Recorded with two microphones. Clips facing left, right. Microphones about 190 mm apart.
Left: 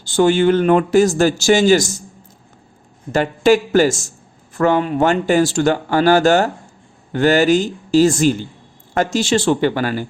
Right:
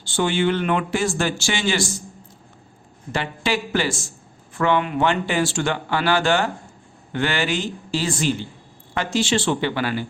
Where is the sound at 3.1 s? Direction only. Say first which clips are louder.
Left 10 dB; 45° left (ahead or behind).